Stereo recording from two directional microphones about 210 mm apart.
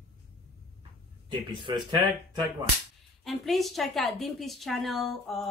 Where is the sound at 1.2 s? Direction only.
20° right (ahead or behind).